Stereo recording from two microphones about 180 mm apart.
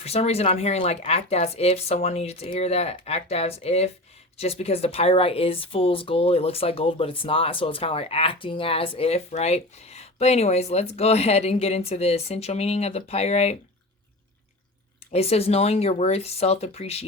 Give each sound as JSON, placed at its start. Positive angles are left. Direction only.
{"t": 0.0, "sound": "speech", "side_deg": 35}
{"t": 15.1, "sound": "speech", "side_deg": 35}